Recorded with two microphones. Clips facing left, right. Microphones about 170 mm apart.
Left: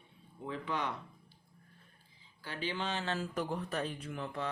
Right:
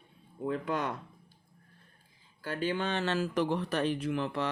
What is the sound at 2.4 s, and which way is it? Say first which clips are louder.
Speech: right 6 dB; 50° right (ahead or behind).